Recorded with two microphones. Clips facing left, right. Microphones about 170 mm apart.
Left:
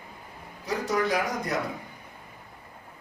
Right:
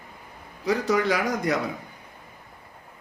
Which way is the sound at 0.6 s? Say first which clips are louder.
Right 4 dB; 90° right.